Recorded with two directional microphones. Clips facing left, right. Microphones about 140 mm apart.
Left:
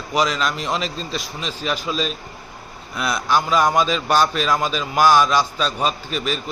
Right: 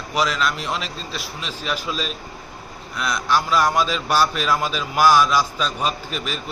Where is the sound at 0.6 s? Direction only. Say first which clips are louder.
Left 3 dB; 35° left (ahead or behind).